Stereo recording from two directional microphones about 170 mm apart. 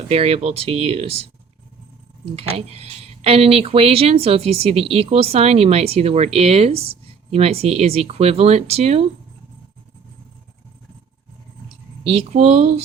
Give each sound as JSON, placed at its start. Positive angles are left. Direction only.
{"t": 0.1, "sound": "speech", "side_deg": -35}
{"t": 2.3, "sound": "speech", "side_deg": -35}
{"t": 12.0, "sound": "speech", "side_deg": -40}